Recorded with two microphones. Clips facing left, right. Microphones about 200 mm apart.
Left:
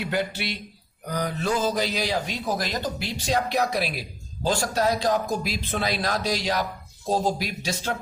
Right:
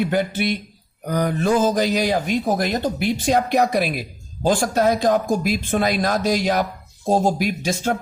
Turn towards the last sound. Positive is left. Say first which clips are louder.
# right 7 dB
turn(degrees=-50)  # may be behind; listen again after turning